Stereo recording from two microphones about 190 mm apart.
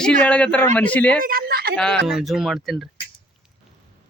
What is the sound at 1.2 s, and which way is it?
Speech, 50° right (ahead or behind).